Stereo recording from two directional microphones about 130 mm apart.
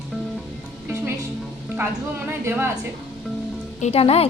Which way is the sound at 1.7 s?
15° right (ahead or behind).